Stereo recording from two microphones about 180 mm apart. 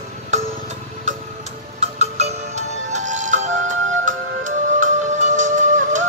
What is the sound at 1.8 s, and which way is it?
Music, 35° right (ahead or behind).